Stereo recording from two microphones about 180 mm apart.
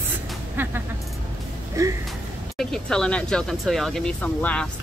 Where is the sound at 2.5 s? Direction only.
5° left (ahead or behind).